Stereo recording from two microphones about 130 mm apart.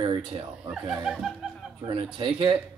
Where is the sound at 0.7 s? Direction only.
5° right (ahead or behind).